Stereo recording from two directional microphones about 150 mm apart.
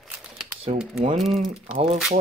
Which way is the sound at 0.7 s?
45° right (ahead or behind).